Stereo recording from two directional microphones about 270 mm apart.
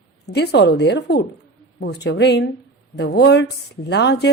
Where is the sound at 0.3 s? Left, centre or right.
Left.